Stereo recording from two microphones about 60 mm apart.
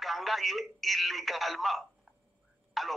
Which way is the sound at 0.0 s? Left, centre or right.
Centre.